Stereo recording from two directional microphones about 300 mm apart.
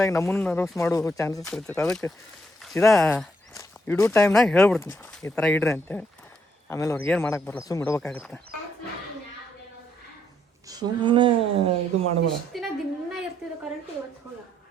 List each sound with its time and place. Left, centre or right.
0.0 s speech: centre
2.6 s a sound: centre
2.8 s speech: centre
10.7 s speech: centre
12.5 s speech: centre